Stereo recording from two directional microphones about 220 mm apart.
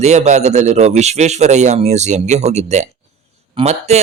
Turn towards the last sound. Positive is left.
turn(degrees=-30)  # may be behind; listen again after turning